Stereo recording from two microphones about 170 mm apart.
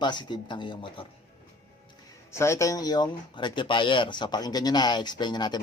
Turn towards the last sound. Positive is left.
turn(degrees=25)  # may be behind; listen again after turning